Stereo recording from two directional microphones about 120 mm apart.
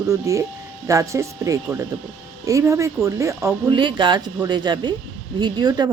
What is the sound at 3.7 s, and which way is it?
Speech, 40° right (ahead or behind).